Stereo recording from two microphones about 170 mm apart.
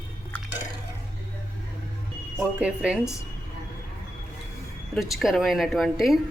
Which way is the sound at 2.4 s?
5° right (ahead or behind).